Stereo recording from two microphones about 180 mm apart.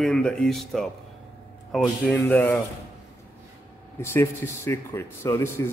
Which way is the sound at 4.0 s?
15° left (ahead or behind).